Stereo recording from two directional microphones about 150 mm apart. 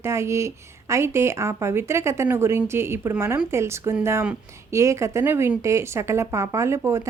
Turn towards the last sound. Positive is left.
turn(degrees=-20)  # may be behind; listen again after turning